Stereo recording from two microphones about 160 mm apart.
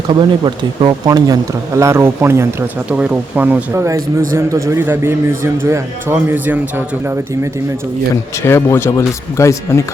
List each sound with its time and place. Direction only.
0.1 s speech: 30° right (ahead or behind); by 7.2 s 15° right (ahead or behind)
8.1 s speech: 15° left (ahead or behind)